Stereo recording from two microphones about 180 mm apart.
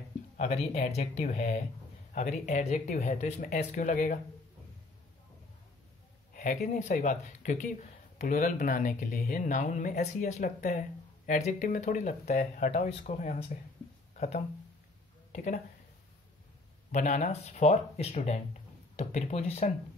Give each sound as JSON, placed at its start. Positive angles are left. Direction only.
{"t": 0.4, "sound": "speech", "side_deg": 35}
{"t": 6.3, "sound": "speech", "side_deg": 50}
{"t": 16.9, "sound": "speech", "side_deg": 45}